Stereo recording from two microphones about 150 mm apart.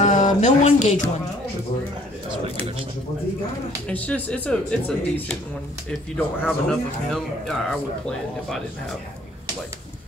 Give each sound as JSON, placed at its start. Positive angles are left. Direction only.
{"t": 0.0, "sound": "speech", "side_deg": 55}
{"t": 3.8, "sound": "speech", "side_deg": 10}